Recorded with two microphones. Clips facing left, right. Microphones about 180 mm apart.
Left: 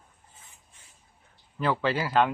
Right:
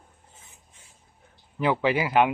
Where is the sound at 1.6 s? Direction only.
15° right (ahead or behind).